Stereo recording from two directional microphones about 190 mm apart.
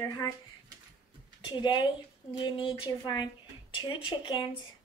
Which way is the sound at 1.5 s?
25° left (ahead or behind).